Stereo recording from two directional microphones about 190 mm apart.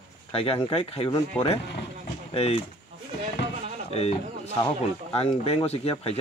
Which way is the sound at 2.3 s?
30° left (ahead or behind).